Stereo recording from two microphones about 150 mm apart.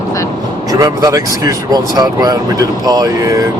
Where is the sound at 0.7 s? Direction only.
20° right (ahead or behind).